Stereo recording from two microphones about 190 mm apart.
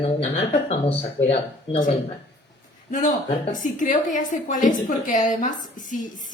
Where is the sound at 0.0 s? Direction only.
35° left (ahead or behind).